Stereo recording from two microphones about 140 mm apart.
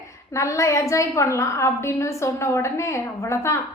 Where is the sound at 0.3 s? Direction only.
20° left (ahead or behind).